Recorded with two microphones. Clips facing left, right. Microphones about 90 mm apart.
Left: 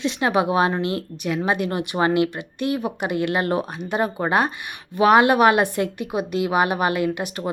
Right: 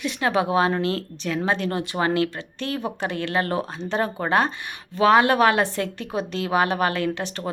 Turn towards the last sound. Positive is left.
turn(degrees=15)  # may be behind; listen again after turning